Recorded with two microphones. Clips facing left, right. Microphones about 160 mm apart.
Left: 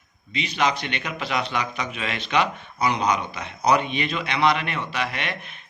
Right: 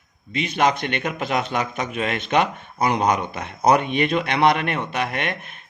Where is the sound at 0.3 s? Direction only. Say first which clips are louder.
Right 4 dB; 50° right (ahead or behind).